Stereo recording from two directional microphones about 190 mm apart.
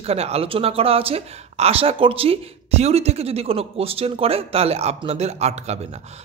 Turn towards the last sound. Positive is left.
turn(degrees=-35)  # may be behind; listen again after turning